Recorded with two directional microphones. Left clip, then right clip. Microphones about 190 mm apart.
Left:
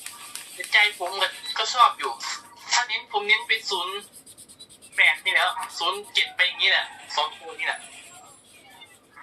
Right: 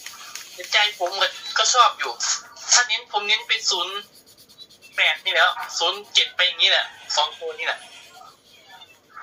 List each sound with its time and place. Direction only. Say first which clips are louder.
0.7 s speech: even; 20° right (ahead or behind)
4.9 s speech: right 1 dB; 20° right (ahead or behind)